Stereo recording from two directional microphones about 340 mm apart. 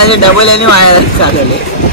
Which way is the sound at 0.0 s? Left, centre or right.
Left.